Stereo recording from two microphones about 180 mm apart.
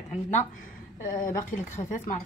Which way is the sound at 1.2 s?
45° left (ahead or behind).